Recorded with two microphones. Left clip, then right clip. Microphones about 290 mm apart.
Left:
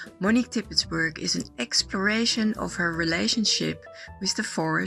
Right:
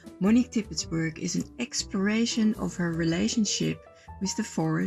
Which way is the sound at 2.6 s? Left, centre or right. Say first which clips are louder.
Left 4 dB; left.